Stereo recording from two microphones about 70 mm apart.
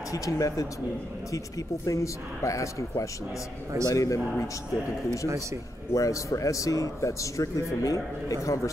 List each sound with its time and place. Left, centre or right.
0.1 s speech: left
1.9 s a man's voice: left
5.9 s a man's voice: left